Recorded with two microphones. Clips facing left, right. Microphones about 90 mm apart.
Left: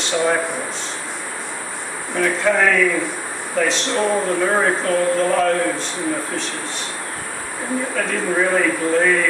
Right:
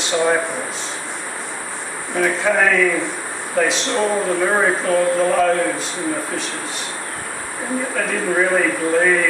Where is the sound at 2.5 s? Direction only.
10° right (ahead or behind).